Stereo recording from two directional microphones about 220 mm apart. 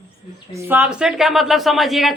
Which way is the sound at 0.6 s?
10° right (ahead or behind).